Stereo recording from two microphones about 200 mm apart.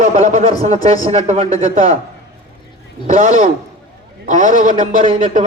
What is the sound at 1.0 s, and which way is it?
Speech, 30° right (ahead or behind).